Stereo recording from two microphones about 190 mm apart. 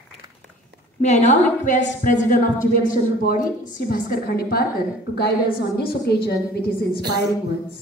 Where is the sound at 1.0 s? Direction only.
35° left (ahead or behind); by 4.6 s 55° left (ahead or behind).